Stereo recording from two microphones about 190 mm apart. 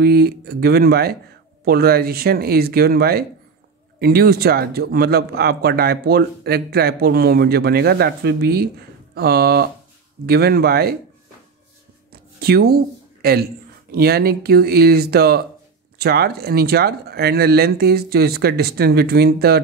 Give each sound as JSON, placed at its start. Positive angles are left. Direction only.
{"t": 0.0, "sound": "speech", "side_deg": -55}
{"t": 12.1, "sound": "a sound", "side_deg": -55}
{"t": 13.9, "sound": "speech", "side_deg": -55}